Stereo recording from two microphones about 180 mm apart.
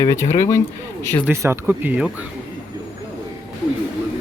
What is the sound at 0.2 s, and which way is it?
Speech, 40° left (ahead or behind).